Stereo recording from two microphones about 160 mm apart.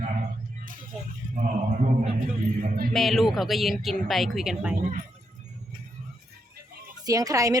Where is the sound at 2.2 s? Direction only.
60° right (ahead or behind).